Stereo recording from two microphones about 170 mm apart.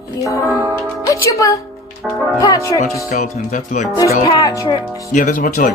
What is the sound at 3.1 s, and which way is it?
Speech, 50° left (ahead or behind).